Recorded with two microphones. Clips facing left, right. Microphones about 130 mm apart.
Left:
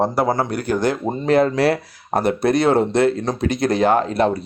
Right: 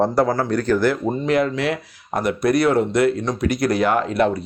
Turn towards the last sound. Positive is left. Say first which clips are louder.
# left 2 dB
turn(degrees=30)  # may be behind; listen again after turning